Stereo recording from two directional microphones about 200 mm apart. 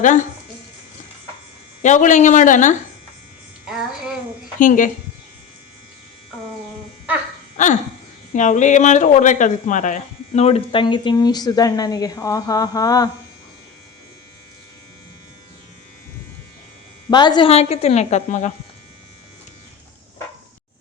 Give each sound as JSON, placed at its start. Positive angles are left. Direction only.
{"t": 1.8, "sound": "a woman's voice", "side_deg": 40}
{"t": 3.7, "sound": "child singing", "side_deg": 0}
{"t": 4.6, "sound": "a woman's voice", "side_deg": 40}
{"t": 7.5, "sound": "a sound", "side_deg": 40}
{"t": 8.3, "sound": "speech", "side_deg": 40}
{"t": 17.1, "sound": "a woman's voice", "side_deg": 20}